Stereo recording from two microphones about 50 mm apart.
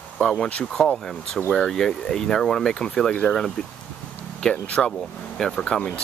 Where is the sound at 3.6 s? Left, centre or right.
Left.